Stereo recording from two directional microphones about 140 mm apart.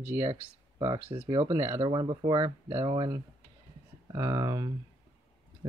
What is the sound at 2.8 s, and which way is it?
Speech, 30° right (ahead or behind).